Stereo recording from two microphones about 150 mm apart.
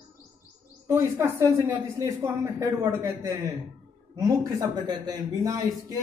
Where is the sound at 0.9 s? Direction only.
20° right (ahead or behind).